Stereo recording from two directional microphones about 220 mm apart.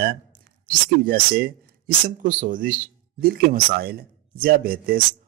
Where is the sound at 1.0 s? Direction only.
40° right (ahead or behind).